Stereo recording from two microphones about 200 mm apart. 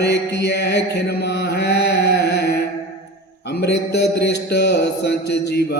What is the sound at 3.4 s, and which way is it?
Mantra, 55° left (ahead or behind).